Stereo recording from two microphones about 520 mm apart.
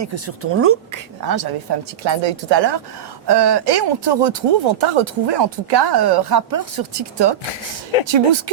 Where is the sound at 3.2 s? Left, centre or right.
Right.